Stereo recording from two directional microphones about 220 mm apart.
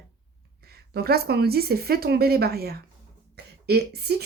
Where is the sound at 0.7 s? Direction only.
45° right (ahead or behind).